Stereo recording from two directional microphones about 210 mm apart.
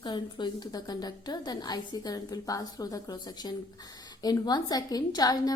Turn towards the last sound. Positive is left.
turn(degrees=15)  # may be behind; listen again after turning